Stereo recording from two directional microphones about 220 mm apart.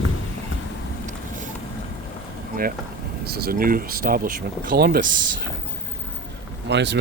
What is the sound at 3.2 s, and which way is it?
Speech, 45° right (ahead or behind).